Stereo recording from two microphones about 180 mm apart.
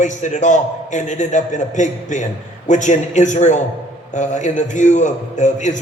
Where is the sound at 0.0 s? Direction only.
40° left (ahead or behind).